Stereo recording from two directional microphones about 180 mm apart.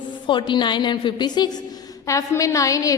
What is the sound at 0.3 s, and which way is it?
A woman's voice, 25° left (ahead or behind).